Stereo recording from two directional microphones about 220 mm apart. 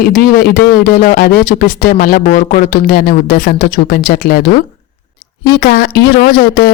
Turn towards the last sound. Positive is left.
turn(degrees=40)  # may be behind; listen again after turning